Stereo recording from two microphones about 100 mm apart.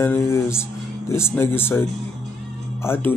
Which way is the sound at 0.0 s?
25° left (ahead or behind).